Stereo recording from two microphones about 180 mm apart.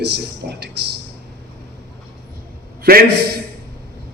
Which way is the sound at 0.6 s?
65° right (ahead or behind).